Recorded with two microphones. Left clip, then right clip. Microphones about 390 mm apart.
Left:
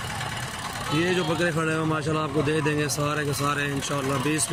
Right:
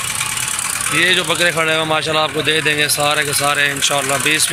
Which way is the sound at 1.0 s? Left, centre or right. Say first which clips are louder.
Right 11 dB; right.